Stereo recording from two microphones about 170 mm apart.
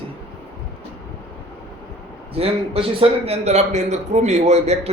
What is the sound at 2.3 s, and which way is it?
A man's voice, 35° right (ahead or behind).